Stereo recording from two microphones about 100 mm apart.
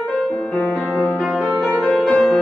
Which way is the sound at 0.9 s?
5° right (ahead or behind).